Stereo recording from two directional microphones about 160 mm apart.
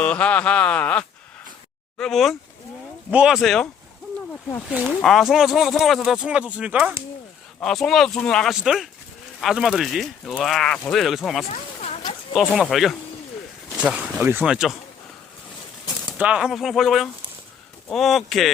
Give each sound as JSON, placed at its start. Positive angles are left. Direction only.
{"t": 0.0, "sound": "speech", "side_deg": 10}
{"t": 4.7, "sound": "speech", "side_deg": -5}
{"t": 11.4, "sound": "a sound", "side_deg": 40}
{"t": 12.3, "sound": "speech", "side_deg": 0}
{"t": 16.0, "sound": "speech", "side_deg": -5}